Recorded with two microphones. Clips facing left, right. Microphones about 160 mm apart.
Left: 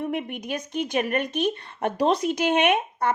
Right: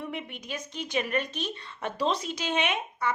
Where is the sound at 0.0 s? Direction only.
55° left (ahead or behind).